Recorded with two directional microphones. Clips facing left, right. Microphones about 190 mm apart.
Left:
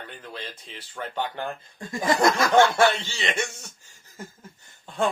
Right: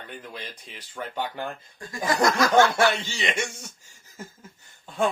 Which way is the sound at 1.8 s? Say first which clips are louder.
Left 2 dB; 25° left (ahead or behind).